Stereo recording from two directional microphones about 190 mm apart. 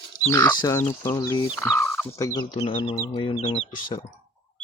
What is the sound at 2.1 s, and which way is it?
Speech, 20° left (ahead or behind).